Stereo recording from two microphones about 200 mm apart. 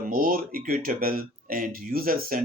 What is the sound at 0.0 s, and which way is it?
Speech, 45° right (ahead or behind).